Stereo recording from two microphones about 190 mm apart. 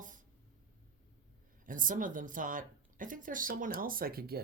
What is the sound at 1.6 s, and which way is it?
Speech, 45° right (ahead or behind).